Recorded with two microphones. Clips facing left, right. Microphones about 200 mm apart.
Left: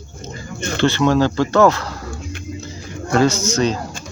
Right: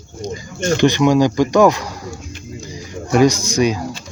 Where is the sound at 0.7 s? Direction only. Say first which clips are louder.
Right 2 dB; 15° right (ahead or behind).